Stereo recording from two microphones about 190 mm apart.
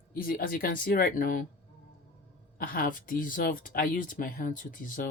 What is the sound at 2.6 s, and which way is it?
Speech, 45° left (ahead or behind).